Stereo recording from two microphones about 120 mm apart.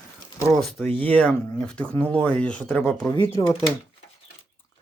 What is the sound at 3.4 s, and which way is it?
Speech, 45° left (ahead or behind).